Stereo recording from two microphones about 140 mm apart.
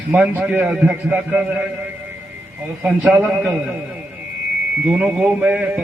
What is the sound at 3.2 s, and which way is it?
Speech, 15° right (ahead or behind).